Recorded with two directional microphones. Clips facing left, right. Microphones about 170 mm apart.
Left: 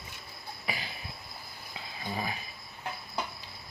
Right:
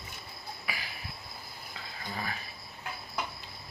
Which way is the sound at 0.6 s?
25° left (ahead or behind).